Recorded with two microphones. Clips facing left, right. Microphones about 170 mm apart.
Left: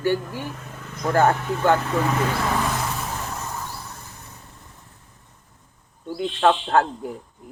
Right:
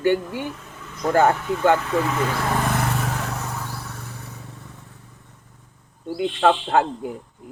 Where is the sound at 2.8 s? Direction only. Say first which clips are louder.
Right 3 dB; 70° right (ahead or behind).